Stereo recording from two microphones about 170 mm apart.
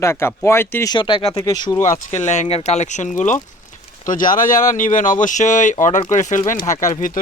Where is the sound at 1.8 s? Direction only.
45° left (ahead or behind).